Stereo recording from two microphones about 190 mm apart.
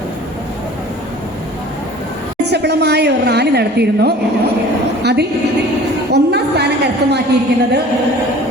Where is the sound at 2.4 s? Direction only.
60° right (ahead or behind).